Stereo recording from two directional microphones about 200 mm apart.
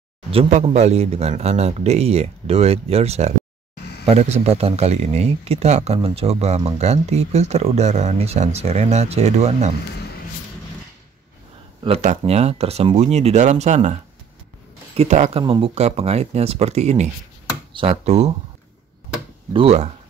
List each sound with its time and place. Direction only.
0.3 s speech: 35° right (ahead or behind)
11.8 s speech: 35° right (ahead or behind)
15.0 s speech: 35° right (ahead or behind)
19.5 s speech: 30° right (ahead or behind)